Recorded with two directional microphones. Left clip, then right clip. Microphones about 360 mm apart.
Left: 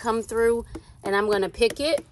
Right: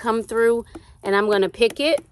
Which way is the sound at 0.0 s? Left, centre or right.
Right.